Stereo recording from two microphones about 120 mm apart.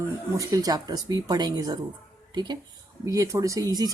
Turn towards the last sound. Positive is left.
turn(degrees=-30)  # may be behind; listen again after turning